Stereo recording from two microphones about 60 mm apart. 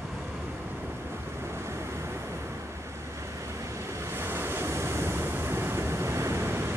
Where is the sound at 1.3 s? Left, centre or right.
Right.